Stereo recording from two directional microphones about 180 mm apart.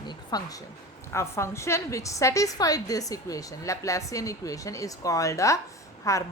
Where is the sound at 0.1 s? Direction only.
20° left (ahead or behind).